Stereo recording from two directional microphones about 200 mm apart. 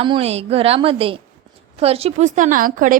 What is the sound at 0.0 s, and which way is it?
A woman's voice, 30° right (ahead or behind).